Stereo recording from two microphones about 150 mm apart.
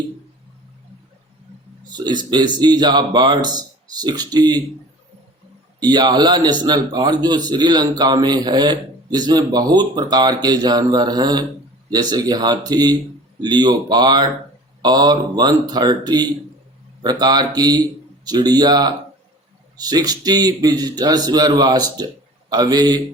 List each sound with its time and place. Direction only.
1.9 s a man's voice: 30° right (ahead or behind)
5.8 s a man's voice: 30° right (ahead or behind)